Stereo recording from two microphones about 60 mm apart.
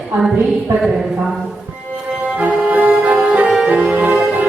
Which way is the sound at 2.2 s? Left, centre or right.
Right.